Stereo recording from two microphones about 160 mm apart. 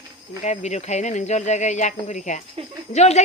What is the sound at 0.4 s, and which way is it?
Speech, 45° left (ahead or behind).